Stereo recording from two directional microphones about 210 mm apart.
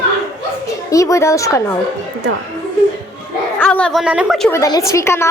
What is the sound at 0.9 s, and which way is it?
Speech, 15° left (ahead or behind).